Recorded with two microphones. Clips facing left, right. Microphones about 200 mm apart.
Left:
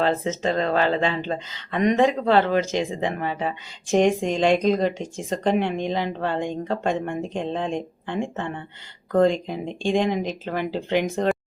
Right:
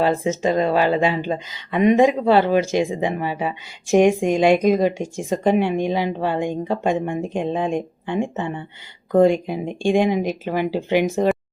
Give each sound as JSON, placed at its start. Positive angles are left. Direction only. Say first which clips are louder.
{"t": 0.0, "sound": "speech", "louder": "right 3 dB", "side_deg": -10}